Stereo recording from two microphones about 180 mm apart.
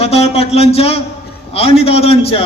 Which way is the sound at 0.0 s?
35° left (ahead or behind).